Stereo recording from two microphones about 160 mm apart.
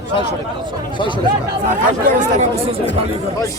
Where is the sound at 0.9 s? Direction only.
30° left (ahead or behind).